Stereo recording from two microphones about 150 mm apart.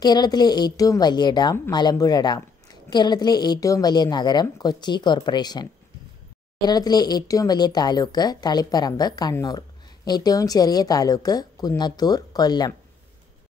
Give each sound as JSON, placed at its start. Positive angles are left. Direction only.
{"t": 0.0, "sound": "speech", "side_deg": 25}